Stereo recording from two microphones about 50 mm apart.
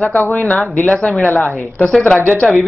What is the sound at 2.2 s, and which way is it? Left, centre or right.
Speech, left.